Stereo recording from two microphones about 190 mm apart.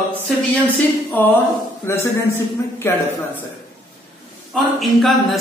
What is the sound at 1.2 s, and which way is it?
Speech, 10° left (ahead or behind).